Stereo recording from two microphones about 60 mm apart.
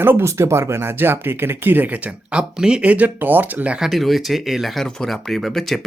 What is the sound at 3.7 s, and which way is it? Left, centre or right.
Speech, centre.